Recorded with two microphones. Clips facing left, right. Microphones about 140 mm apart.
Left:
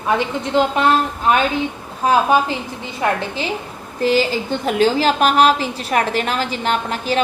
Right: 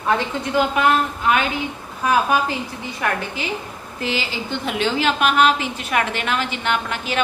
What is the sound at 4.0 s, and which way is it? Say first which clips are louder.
A woman's voice: left 9 dB; 40° left (ahead or behind).